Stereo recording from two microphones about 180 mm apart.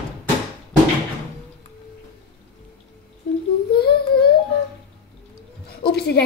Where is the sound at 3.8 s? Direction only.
60° left (ahead or behind).